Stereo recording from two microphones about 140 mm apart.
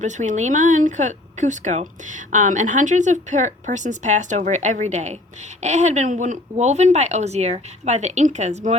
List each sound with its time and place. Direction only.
0.0 s speech: 60° right (ahead or behind)